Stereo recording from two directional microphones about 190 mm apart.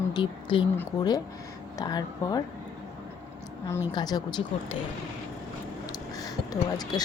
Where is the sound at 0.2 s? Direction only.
25° left (ahead or behind).